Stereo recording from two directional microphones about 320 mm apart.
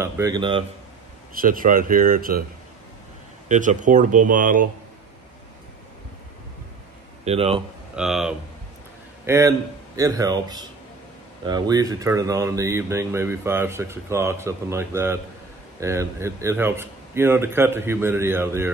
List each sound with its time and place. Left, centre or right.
0.0 s speech: centre
1.3 s speech: right
3.4 s speech: right
7.2 s speech: centre
7.9 s speech: centre